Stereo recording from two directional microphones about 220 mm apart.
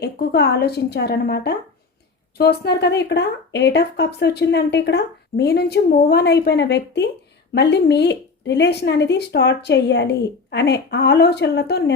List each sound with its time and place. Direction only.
0.0 s a woman's voice: 45° left (ahead or behind)